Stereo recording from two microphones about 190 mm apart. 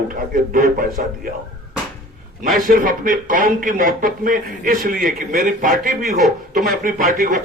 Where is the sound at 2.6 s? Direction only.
45° right (ahead or behind).